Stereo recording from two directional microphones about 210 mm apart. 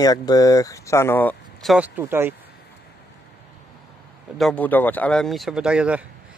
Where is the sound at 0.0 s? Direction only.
20° left (ahead or behind); by 2.3 s 10° right (ahead or behind).